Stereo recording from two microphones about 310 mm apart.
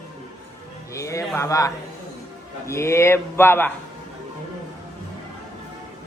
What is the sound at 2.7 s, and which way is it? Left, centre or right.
A man's voice, centre.